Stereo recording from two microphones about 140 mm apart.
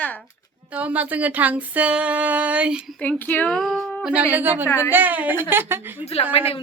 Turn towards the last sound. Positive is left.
turn(degrees=45)  # may be behind; listen again after turning